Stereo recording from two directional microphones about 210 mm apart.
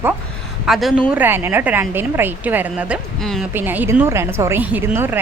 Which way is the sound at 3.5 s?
10° right (ahead or behind).